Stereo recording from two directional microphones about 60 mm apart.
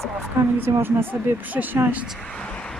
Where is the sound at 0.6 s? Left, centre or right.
Right.